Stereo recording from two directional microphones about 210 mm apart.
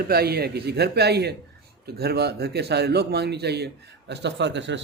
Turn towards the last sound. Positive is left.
turn(degrees=-60)  # may be behind; listen again after turning